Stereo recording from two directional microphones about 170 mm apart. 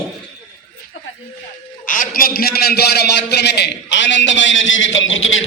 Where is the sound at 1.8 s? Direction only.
50° left (ahead or behind); by 4.9 s 90° left.